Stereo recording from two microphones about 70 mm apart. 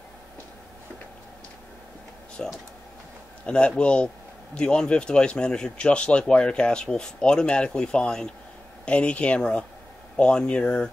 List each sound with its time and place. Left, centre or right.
2.4 s speech: centre